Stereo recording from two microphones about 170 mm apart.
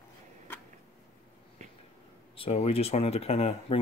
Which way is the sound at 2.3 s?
35° left (ahead or behind).